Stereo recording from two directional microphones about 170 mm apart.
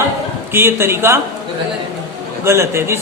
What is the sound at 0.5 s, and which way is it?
Speech, 15° right (ahead or behind).